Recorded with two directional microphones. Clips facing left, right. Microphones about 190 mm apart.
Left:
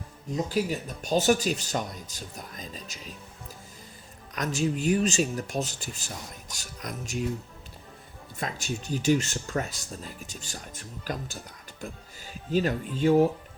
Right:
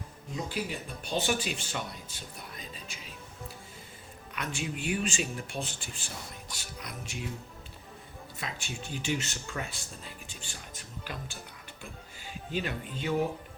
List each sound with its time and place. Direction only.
0.4 s speech: 40° left (ahead or behind)
4.4 s speech: 40° left (ahead or behind)
8.4 s speech: 40° left (ahead or behind)